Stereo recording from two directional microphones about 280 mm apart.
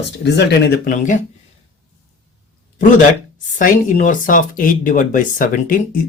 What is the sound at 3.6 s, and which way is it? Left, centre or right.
Speech, left.